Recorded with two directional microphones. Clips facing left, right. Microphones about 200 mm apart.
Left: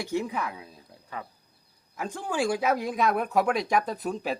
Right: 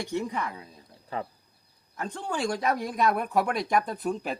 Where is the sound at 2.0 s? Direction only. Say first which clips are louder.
Left 2 dB; 5° left (ahead or behind).